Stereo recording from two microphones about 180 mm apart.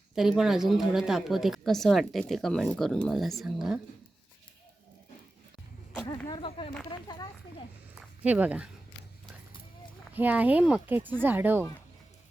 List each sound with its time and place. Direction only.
0.2 s a woman's voice: centre (ahead or behind)
6.1 s a sound: 25° left (ahead or behind)
6.9 s speech: 25° left (ahead or behind)
7.9 s speech: 10° right (ahead or behind)
10.2 s speech: 10° right (ahead or behind)